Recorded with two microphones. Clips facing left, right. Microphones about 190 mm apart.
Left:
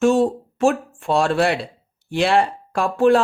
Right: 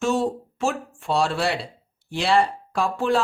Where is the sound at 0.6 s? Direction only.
55° left (ahead or behind).